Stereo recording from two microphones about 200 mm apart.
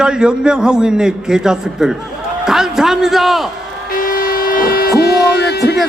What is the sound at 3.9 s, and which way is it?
Train, 45° left (ahead or behind).